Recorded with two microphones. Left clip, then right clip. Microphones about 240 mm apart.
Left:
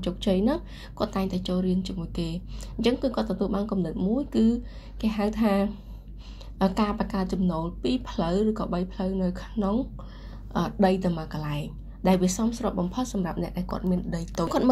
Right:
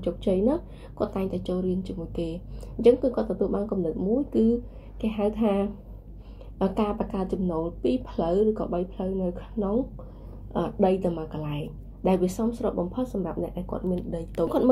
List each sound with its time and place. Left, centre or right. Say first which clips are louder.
0.0 s a woman's voice: right 2 dB; left